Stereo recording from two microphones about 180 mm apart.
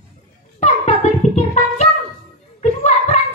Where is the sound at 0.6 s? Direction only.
40° left (ahead or behind).